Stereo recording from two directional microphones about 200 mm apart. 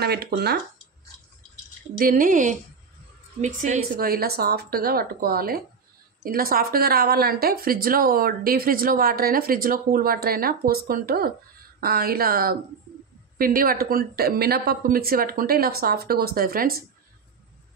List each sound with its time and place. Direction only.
0.0 s a woman's voice: 55° right (ahead or behind)
2.0 s a woman's voice: 45° right (ahead or behind)